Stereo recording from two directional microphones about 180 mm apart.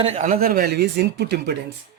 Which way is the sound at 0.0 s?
40° right (ahead or behind).